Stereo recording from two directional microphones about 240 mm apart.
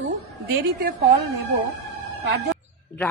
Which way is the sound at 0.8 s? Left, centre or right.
Right.